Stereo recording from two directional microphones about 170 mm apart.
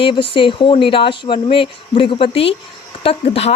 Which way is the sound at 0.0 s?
30° left (ahead or behind).